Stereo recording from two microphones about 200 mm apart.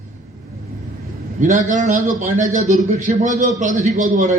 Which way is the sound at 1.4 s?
40° right (ahead or behind).